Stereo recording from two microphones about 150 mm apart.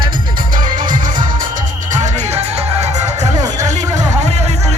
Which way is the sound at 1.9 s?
50° right (ahead or behind).